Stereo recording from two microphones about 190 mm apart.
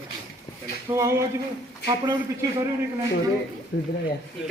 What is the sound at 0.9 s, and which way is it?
Speech, 15° right (ahead or behind).